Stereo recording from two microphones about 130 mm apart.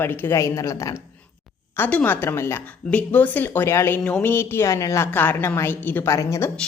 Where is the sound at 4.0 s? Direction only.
10° left (ahead or behind).